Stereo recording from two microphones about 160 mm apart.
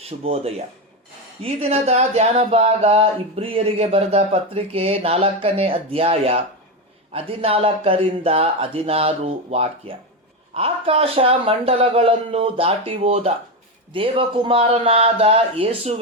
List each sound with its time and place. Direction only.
0.2 s speech: 40° right (ahead or behind)